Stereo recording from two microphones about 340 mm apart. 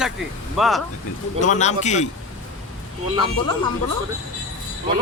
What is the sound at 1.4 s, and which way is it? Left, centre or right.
Speech, left.